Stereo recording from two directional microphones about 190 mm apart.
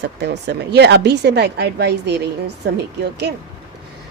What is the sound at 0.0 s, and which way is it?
Speech, 65° right (ahead or behind).